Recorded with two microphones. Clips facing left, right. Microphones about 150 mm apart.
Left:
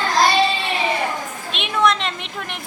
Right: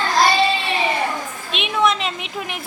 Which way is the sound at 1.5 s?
Centre (ahead or behind).